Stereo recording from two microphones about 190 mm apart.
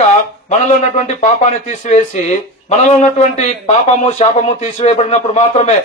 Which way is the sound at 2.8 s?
35° left (ahead or behind).